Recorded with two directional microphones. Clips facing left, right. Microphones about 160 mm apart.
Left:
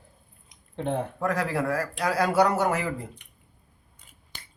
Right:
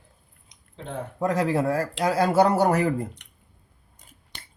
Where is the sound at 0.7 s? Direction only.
65° left (ahead or behind).